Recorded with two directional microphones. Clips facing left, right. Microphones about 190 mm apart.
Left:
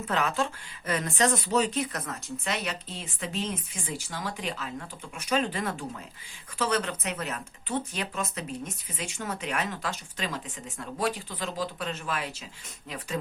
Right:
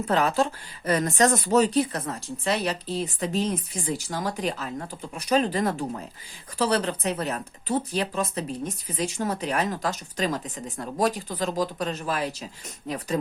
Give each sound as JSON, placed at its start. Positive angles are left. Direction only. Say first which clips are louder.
{"t": 0.1, "sound": "speech", "louder": "right 5 dB", "side_deg": -35}